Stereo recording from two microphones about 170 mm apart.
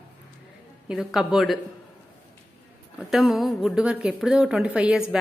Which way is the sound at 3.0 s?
Centre (ahead or behind).